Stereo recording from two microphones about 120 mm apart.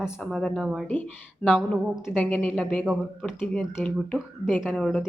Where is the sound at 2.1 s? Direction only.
10° left (ahead or behind).